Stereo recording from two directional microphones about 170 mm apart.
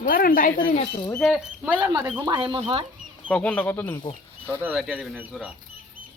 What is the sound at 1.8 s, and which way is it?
Speech, 20° right (ahead or behind).